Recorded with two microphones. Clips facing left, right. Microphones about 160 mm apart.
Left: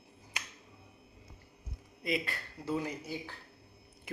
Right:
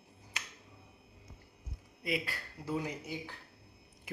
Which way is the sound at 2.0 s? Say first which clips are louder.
Left 2 dB; 5° right (ahead or behind).